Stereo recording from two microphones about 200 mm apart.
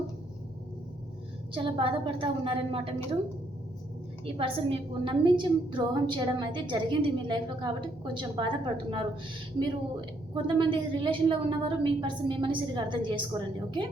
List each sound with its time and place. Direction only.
1.5 s a woman's voice: 25° right (ahead or behind)
4.4 s a woman's voice: 25° right (ahead or behind)
10.3 s a woman's voice: 25° right (ahead or behind)